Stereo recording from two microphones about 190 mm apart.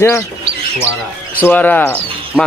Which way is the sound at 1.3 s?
10° left (ahead or behind).